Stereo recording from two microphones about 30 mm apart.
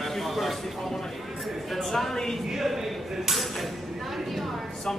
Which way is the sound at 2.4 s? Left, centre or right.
Centre.